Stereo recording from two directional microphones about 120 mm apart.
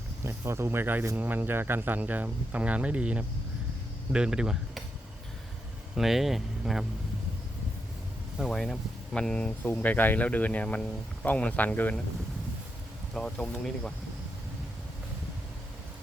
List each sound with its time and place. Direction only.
0.3 s speech: 25° right (ahead or behind); by 4.8 s 5° right (ahead or behind)
6.0 s speech: centre (ahead or behind)
8.4 s speech: 5° left (ahead or behind)
13.1 s speech: 5° left (ahead or behind)